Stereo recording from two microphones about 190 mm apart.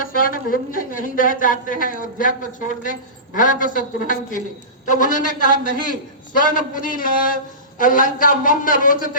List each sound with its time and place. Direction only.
0.0 s a woman's voice: 50° left (ahead or behind)